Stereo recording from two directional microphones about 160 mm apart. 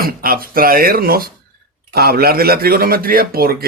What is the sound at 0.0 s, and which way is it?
A man's voice, 65° right (ahead or behind).